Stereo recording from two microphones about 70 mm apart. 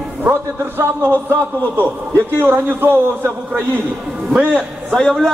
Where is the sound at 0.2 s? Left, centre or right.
Right.